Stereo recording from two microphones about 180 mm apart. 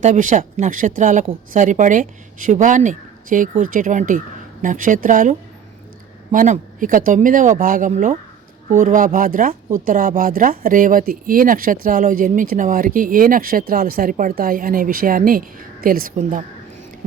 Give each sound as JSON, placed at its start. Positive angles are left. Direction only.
{"t": 0.0, "sound": "speech", "side_deg": -45}